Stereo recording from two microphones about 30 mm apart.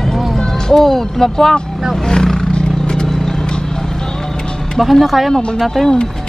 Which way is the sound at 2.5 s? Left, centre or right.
Left.